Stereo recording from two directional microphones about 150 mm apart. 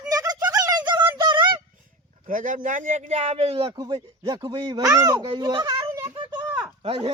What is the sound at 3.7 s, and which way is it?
Speech, 25° right (ahead or behind).